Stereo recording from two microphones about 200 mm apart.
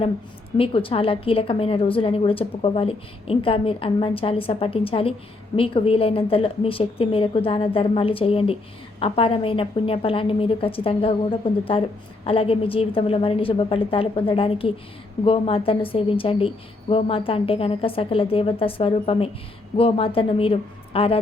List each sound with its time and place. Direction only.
0.5 s a woman's voice: 25° left (ahead or behind)